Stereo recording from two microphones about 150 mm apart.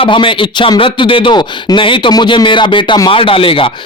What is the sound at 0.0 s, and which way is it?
Speech, 35° left (ahead or behind).